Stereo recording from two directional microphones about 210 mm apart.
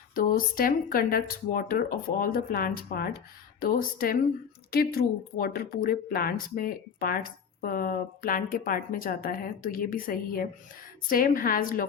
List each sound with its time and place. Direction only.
0.1 s a woman's voice: 40° left (ahead or behind)